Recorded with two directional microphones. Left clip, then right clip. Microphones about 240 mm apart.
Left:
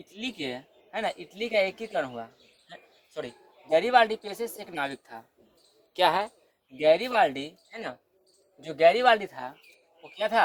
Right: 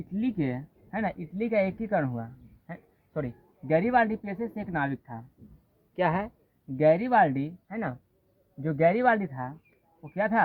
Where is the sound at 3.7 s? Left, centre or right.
Left.